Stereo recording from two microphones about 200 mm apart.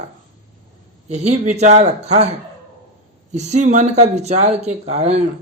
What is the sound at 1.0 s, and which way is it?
A man's voice, 35° right (ahead or behind).